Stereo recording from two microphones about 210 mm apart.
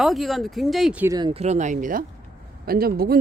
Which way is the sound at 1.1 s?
25° right (ahead or behind).